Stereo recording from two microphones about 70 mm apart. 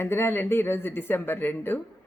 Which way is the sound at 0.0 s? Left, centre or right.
Left.